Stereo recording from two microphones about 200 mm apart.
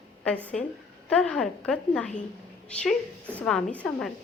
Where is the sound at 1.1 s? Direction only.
5° left (ahead or behind).